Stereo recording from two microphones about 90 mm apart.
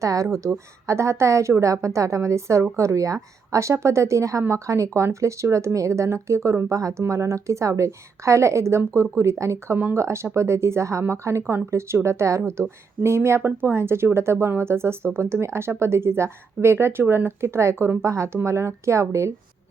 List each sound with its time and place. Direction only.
0.0 s a woman's voice: 35° right (ahead or behind)
9.7 s speech: 20° right (ahead or behind)
10.0 s a woman's voice: 30° right (ahead or behind)